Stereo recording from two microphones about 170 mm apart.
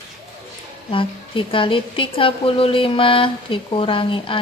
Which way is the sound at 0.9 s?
30° left (ahead or behind).